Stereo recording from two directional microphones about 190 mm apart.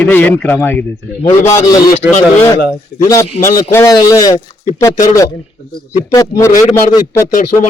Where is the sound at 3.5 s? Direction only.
15° left (ahead or behind).